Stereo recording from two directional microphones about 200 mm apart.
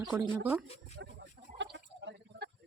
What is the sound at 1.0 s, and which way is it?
Fowl, 65° right (ahead or behind).